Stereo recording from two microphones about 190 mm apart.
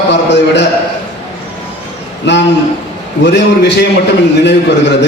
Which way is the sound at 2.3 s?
65° left (ahead or behind).